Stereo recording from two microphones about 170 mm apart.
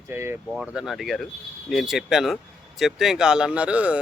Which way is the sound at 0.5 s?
5° right (ahead or behind).